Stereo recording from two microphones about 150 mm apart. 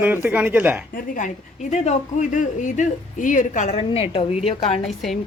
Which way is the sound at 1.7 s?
50° left (ahead or behind).